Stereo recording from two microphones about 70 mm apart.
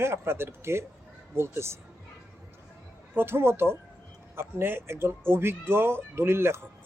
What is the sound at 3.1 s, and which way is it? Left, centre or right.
Speech, right.